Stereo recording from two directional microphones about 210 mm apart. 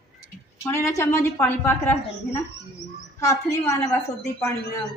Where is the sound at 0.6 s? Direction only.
15° left (ahead or behind).